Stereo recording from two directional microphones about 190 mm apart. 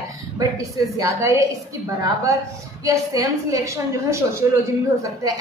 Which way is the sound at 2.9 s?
15° right (ahead or behind).